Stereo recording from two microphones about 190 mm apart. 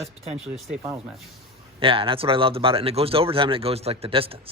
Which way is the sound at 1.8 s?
30° right (ahead or behind).